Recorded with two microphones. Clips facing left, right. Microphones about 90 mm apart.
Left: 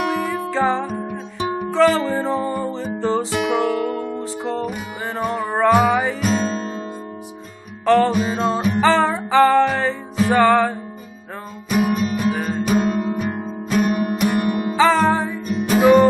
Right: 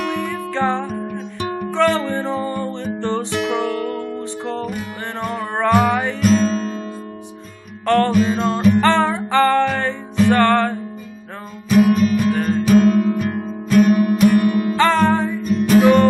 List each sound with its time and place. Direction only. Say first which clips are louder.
0.0 s music: left 1 dB; 10° left (ahead or behind)
7.8 s music: even; 5° left (ahead or behind); by 14.8 s 20° left (ahead or behind)
14.8 s music: left 1 dB; 5° left (ahead or behind)